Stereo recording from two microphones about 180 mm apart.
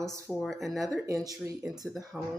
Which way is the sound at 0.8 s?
20° right (ahead or behind).